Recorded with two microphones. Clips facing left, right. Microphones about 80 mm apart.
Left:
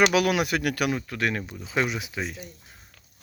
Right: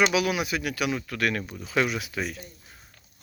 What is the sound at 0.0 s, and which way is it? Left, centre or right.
Speech, left.